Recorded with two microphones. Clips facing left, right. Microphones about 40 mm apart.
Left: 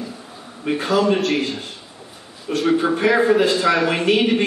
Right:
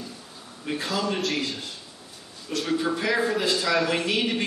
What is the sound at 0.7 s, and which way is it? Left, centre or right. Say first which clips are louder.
A man's voice: left 9 dB; left.